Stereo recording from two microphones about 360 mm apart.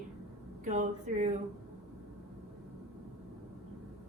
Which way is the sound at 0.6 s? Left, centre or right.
Right.